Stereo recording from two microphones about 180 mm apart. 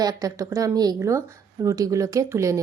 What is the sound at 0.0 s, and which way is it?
Speech, 20° right (ahead or behind).